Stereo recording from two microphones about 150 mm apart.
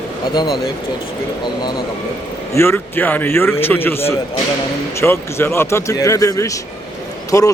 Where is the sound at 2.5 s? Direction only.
15° left (ahead or behind).